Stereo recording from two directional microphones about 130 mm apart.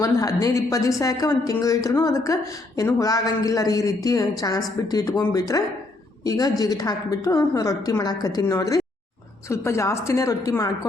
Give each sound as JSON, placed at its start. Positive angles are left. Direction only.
{"t": 0.0, "sound": "a woman's voice", "side_deg": 25}